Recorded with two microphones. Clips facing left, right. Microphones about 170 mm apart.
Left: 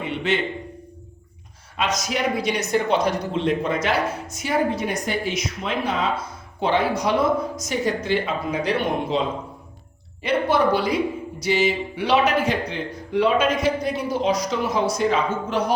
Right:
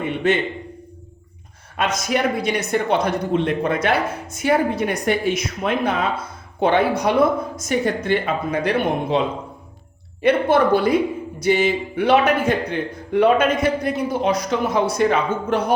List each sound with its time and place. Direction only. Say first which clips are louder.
0.0 s a sound: right 4 dB; 50° right (ahead or behind)
1.7 s speech: right 3 dB; 55° right (ahead or behind)
10.2 s speech: right 4 dB; 55° right (ahead or behind)